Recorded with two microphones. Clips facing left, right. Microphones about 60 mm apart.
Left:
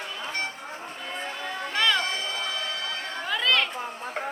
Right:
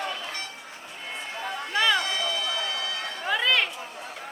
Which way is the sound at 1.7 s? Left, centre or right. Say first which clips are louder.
Right 1 dB; centre.